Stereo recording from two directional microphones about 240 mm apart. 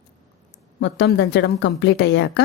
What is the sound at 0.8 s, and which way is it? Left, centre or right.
A woman's voice, left.